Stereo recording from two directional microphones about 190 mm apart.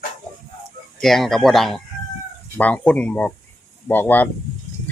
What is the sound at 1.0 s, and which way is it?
Speech, centre (ahead or behind).